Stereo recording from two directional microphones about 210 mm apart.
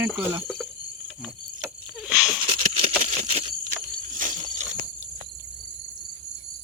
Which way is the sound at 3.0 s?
30° right (ahead or behind).